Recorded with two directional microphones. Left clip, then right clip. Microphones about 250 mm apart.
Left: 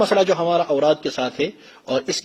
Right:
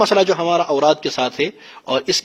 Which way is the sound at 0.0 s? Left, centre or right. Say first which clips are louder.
Right 2 dB; right.